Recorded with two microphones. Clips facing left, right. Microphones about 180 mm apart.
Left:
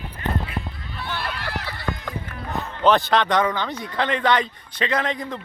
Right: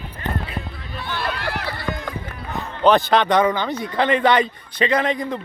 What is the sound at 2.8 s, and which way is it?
A man's voice, centre (ahead or behind).